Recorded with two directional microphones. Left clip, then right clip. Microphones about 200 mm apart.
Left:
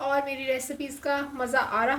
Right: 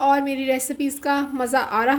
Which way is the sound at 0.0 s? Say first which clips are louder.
Right 8 dB; 45° right (ahead or behind).